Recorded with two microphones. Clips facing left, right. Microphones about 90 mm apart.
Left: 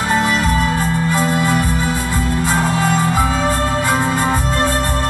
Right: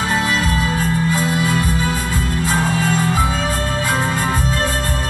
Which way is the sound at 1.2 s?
50° left (ahead or behind).